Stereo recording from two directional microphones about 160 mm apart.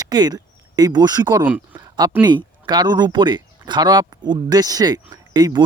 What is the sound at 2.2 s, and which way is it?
Speech, 25° right (ahead or behind).